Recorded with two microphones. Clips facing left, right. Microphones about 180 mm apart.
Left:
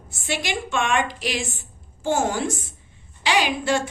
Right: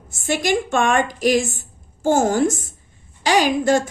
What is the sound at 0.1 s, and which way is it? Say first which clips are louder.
A woman's voice: right 7 dB; 45° right (ahead or behind).